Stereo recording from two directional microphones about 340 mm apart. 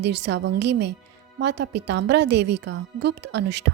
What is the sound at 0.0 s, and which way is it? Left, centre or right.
A woman's voice, right.